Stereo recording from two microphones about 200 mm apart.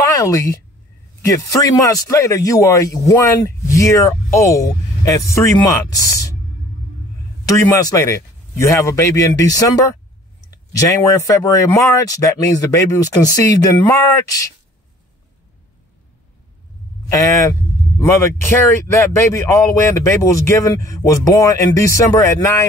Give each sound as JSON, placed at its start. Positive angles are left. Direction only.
{"t": 0.0, "sound": "a man's voice", "side_deg": 15}
{"t": 7.4, "sound": "a man's voice", "side_deg": 15}
{"t": 17.1, "sound": "speech", "side_deg": 15}
{"t": 19.3, "sound": "a man's voice", "side_deg": 15}